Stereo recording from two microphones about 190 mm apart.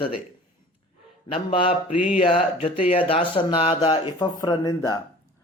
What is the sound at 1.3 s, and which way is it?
Speech, 30° left (ahead or behind).